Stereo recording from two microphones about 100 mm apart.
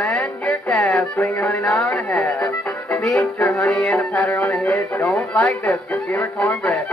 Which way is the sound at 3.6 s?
5° left (ahead or behind).